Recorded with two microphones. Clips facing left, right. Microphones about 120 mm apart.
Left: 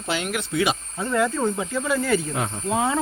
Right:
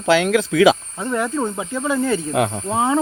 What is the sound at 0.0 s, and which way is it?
Speech, 90° right.